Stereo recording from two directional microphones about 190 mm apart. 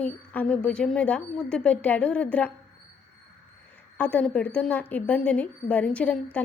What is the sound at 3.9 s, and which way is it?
Speech, 5° left (ahead or behind).